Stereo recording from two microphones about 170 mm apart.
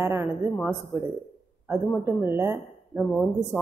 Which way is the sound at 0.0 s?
15° right (ahead or behind).